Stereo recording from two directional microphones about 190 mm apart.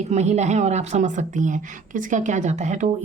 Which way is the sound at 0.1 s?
35° right (ahead or behind).